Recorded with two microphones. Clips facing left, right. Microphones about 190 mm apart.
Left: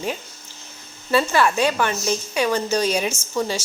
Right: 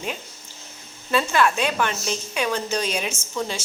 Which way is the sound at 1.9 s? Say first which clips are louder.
Left 4 dB; 15° left (ahead or behind).